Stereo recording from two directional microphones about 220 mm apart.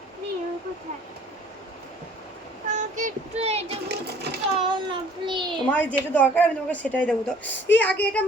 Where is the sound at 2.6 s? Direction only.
35° right (ahead or behind).